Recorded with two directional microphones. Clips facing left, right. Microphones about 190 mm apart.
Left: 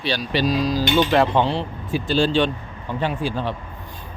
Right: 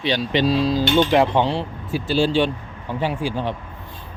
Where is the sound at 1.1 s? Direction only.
15° right (ahead or behind).